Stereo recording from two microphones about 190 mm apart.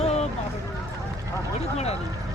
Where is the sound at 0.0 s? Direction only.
35° left (ahead or behind).